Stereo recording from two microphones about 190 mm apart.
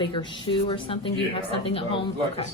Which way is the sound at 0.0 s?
25° left (ahead or behind).